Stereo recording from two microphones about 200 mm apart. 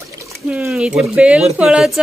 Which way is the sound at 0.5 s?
5° right (ahead or behind).